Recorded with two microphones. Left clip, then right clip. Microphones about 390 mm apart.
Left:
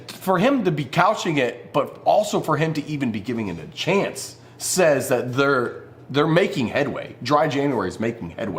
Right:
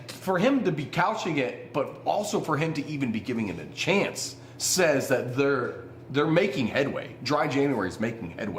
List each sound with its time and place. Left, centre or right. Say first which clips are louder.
0.3 s a man's voice: left 5 dB; left